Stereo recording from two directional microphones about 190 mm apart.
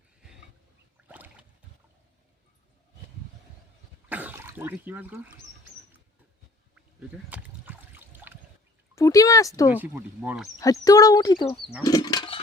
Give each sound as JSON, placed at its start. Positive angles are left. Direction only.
{"t": 1.0, "sound": "a sound", "side_deg": -10}
{"t": 4.1, "sound": "speech", "side_deg": -10}
{"t": 6.7, "sound": "a sound", "side_deg": -5}
{"t": 9.0, "sound": "speech", "side_deg": 15}
{"t": 9.7, "sound": "speech", "side_deg": -10}
{"t": 10.6, "sound": "speech", "side_deg": 20}